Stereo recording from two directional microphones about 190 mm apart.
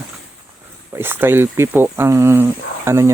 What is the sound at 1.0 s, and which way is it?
Speech, 10° right (ahead or behind).